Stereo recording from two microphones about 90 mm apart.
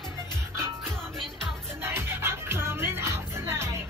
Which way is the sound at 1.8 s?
25° right (ahead or behind).